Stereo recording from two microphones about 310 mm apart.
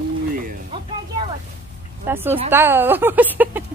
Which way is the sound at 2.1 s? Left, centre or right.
Centre.